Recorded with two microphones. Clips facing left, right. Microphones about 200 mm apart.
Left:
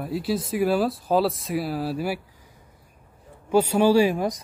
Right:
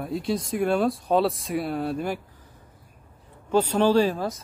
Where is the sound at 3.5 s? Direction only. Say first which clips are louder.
Left 2 dB; 10° left (ahead or behind).